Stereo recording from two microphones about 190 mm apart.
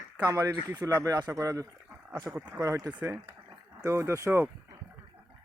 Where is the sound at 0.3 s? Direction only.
15° right (ahead or behind).